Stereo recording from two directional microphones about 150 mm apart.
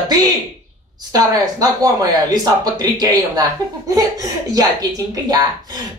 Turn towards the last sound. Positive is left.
turn(degrees=-25)  # may be behind; listen again after turning